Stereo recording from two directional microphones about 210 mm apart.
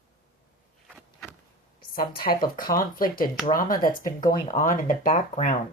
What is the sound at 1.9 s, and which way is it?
Speech, 45° left (ahead or behind).